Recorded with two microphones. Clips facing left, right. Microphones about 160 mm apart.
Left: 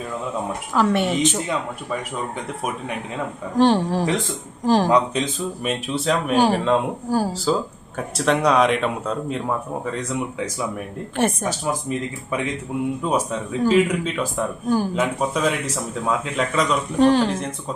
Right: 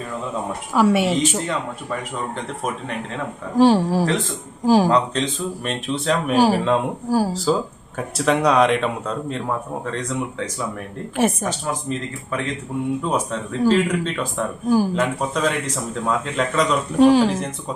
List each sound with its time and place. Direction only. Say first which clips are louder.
0.7 s speech: right 3 dB; 5° right (ahead or behind)
3.5 s speech: right 2 dB; 5° right (ahead or behind)
4.9 s speech: even; 10° left (ahead or behind)
11.4 s speech: left 1 dB; 10° left (ahead or behind)